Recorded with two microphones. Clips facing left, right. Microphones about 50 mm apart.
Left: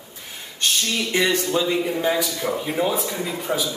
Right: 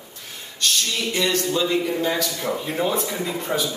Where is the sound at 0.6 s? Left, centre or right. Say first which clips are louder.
Left 1 dB; left.